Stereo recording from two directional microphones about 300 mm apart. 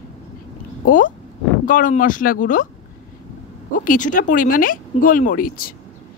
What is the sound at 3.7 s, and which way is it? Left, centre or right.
A woman's voice, left.